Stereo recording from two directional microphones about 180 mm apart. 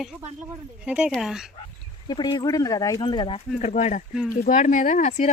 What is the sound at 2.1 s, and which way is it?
Speech, 25° left (ahead or behind).